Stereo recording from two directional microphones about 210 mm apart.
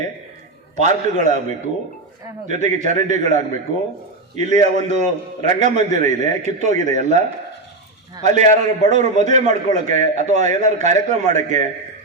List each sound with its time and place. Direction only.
0.8 s a man's voice: 35° right (ahead or behind)
8.2 s a man's voice: 35° right (ahead or behind)